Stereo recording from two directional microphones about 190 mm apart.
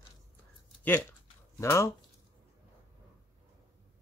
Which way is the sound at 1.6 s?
15° left (ahead or behind).